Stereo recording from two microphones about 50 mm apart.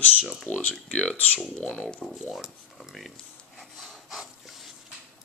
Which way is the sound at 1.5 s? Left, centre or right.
Centre.